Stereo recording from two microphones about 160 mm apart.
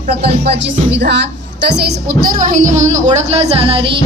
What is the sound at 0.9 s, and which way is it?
Speech, 90° right.